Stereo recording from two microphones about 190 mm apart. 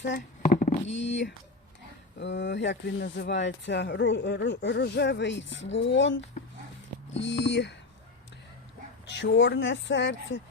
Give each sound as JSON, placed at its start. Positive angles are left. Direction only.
{"t": 0.0, "sound": "speech", "side_deg": 60}
{"t": 0.7, "sound": "speech", "side_deg": 35}
{"t": 0.9, "sound": "speech", "side_deg": 70}
{"t": 9.0, "sound": "speech", "side_deg": 70}